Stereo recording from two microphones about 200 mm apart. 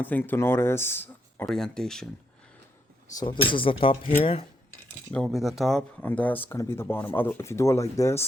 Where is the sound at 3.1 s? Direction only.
25° left (ahead or behind).